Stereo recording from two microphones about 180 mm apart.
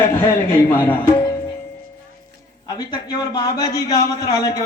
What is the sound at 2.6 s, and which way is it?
A man's voice, 20° left (ahead or behind).